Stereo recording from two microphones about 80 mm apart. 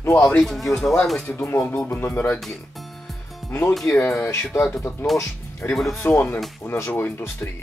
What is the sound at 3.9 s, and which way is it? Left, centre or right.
Speech, left.